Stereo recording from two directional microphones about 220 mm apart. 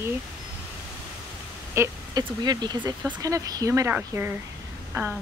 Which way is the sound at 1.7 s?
15° right (ahead or behind).